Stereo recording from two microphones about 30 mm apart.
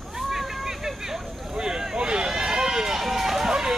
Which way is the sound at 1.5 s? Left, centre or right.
Centre.